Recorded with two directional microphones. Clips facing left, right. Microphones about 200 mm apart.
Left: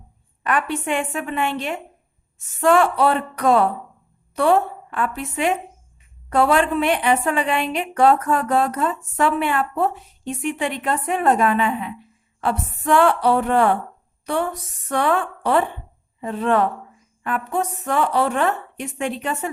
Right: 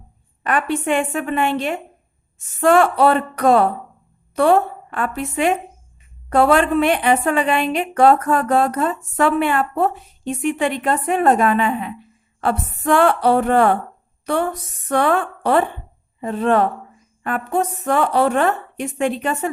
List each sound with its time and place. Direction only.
1.1 s a woman's voice: 45° right (ahead or behind)
6.6 s a woman's voice: 50° right (ahead or behind)
16.2 s a woman's voice: 40° right (ahead or behind)